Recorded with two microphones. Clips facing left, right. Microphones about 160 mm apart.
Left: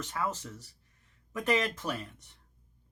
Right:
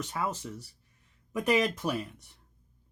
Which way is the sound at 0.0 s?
15° right (ahead or behind).